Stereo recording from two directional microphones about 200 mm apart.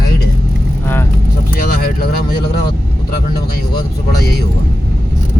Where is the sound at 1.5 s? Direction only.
45° left (ahead or behind).